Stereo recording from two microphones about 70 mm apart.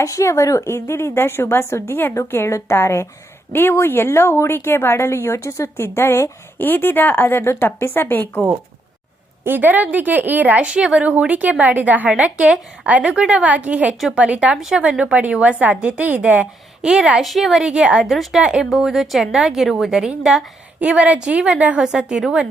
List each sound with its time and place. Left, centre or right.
0.0 s a woman's voice: left
6.6 s a woman's voice: left
9.4 s a woman's voice: right; by 17.6 s centre
17.6 s a woman's voice: centre
21.8 s a woman's voice: centre